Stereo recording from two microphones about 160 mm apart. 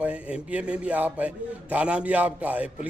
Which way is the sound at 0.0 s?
10° right (ahead or behind).